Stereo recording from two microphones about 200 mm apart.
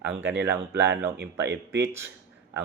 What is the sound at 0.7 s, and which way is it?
Speech, 60° right (ahead or behind).